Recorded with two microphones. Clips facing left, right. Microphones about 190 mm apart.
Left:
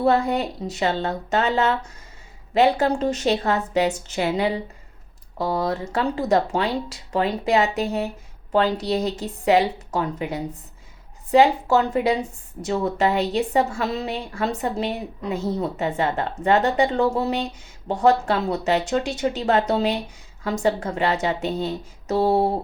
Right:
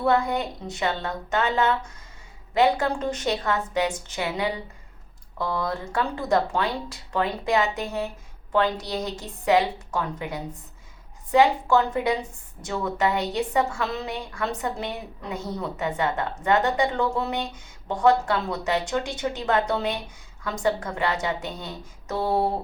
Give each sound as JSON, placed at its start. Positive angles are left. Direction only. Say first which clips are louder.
{"t": 0.0, "sound": "a woman's voice", "louder": "left 3 dB", "side_deg": 25}